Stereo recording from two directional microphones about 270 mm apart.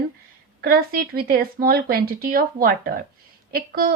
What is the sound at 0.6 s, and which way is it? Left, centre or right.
Speech, right.